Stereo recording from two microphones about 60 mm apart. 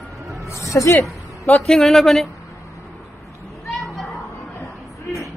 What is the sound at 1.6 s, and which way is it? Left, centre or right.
Speech, centre.